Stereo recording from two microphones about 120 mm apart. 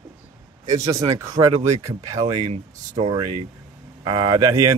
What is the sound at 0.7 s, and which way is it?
Speech, 25° right (ahead or behind).